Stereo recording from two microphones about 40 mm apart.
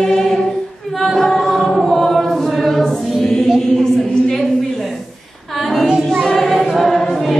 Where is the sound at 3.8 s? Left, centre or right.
Centre.